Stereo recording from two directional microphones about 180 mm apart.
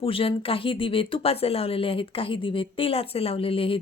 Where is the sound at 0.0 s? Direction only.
30° left (ahead or behind).